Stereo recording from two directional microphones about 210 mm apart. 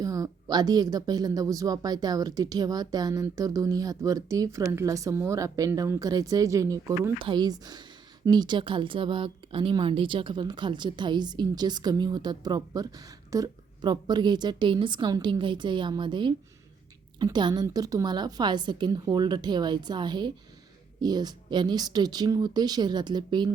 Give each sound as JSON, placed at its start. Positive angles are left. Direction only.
{"t": 0.0, "sound": "speech", "side_deg": -15}